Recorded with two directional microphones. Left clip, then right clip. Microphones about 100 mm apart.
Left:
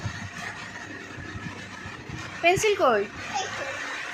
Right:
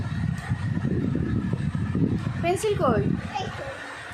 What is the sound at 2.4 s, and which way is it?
Speech, centre (ahead or behind).